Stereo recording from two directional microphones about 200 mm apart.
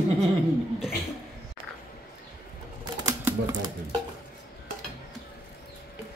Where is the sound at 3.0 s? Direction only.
20° right (ahead or behind).